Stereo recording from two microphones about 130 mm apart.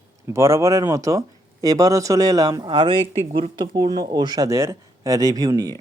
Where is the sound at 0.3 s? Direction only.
20° right (ahead or behind); by 3.5 s 50° right (ahead or behind).